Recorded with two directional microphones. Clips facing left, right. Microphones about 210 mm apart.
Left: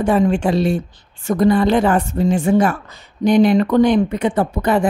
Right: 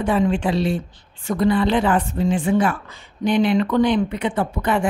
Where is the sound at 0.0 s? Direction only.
45° left (ahead or behind).